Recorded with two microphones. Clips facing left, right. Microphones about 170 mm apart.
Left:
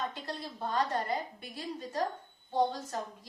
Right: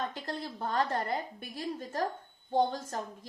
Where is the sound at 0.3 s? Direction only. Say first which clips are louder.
Right 2 dB; 50° right (ahead or behind).